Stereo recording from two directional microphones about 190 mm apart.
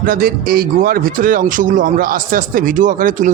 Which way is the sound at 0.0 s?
50° right (ahead or behind).